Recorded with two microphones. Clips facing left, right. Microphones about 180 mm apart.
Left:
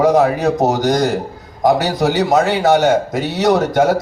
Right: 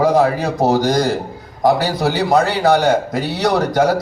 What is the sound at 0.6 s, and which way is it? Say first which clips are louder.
Speech: right 3 dB; 20° left (ahead or behind).